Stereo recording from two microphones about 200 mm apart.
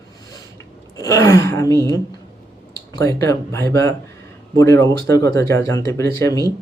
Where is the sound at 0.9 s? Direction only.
15° left (ahead or behind).